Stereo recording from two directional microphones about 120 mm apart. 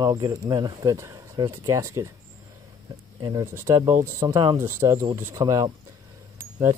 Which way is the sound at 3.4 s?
20° right (ahead or behind).